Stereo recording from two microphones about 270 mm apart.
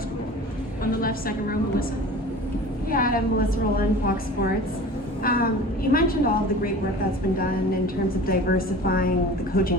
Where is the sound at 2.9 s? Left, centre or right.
Left.